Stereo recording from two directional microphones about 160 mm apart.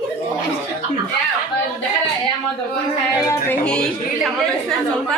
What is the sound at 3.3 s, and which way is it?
A woman's voice, 10° left (ahead or behind).